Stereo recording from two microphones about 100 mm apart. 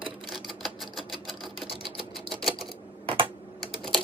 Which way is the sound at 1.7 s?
55° right (ahead or behind).